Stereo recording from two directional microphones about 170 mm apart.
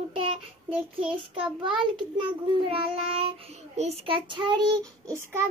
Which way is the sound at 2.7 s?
35° right (ahead or behind).